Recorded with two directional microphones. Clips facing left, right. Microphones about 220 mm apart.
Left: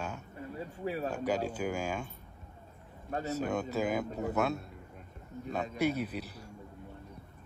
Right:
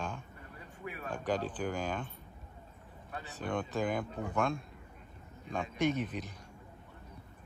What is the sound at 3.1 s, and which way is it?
Speech, 40° left (ahead or behind).